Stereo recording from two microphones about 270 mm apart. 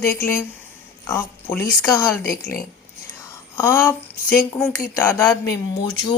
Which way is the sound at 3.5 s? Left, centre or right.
Centre.